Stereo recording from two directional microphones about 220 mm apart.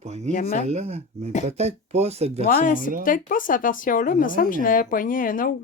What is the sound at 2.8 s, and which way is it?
Speech, 40° right (ahead or behind).